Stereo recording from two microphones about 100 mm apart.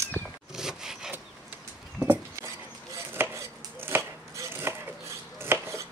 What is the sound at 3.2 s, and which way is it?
Chopping, 25° right (ahead or behind).